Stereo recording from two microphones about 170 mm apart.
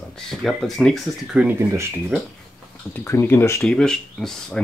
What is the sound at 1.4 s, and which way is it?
Speech, 10° right (ahead or behind).